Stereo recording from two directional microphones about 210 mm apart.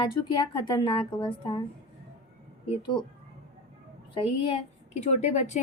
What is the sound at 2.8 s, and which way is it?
Speech, 20° left (ahead or behind).